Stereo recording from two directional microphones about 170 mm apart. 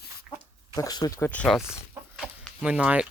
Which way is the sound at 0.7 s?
20° left (ahead or behind).